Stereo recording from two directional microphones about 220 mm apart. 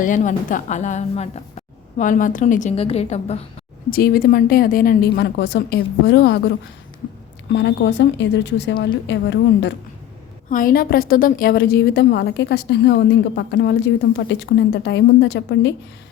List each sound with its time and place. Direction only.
0.0 s a woman's voice: 35° left (ahead or behind)
3.8 s a woman's voice: 40° left (ahead or behind)
7.5 s a woman's voice: 55° left (ahead or behind)
10.5 s a woman's voice: 40° left (ahead or behind)